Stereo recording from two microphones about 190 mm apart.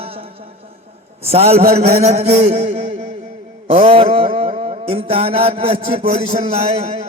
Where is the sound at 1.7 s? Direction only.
35° right (ahead or behind).